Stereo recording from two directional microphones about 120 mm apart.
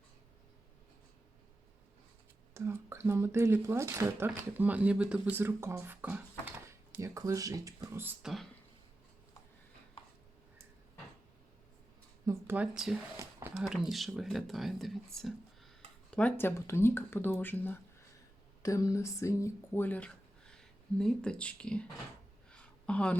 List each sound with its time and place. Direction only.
2.6 s speech: 20° right (ahead or behind)
7.0 s speech: 25° right (ahead or behind)
8.2 s speech: centre (ahead or behind)
12.2 s a sound: 25° right (ahead or behind)
12.5 s speech: 5° right (ahead or behind)
16.1 s speech: 15° left (ahead or behind)
18.6 s speech: 25° left (ahead or behind); by 21.8 s 10° left (ahead or behind)
22.4 s a sound: 10° left (ahead or behind)